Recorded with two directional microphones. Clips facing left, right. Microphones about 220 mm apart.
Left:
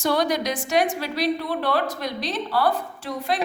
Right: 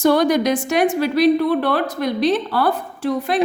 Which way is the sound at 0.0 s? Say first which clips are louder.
Right 7 dB; 50° right (ahead or behind).